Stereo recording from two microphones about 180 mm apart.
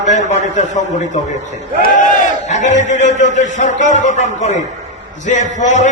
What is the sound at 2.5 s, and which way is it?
A man's voice, 40° left (ahead or behind).